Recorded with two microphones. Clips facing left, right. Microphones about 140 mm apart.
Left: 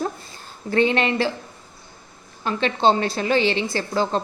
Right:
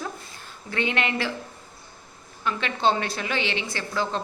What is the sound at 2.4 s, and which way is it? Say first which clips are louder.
A woman's voice: left 5 dB; 30° left (ahead or behind).